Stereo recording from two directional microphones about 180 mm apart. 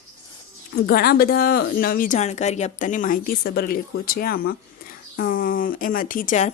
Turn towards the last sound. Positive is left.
turn(degrees=45)  # may be behind; listen again after turning